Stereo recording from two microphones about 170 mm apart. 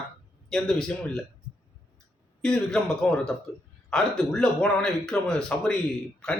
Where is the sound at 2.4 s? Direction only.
5° left (ahead or behind).